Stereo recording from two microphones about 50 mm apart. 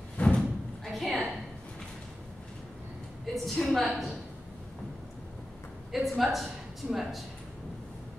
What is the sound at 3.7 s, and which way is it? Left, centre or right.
Speech, centre.